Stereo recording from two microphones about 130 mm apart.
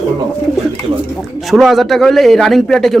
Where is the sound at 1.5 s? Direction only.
Centre (ahead or behind).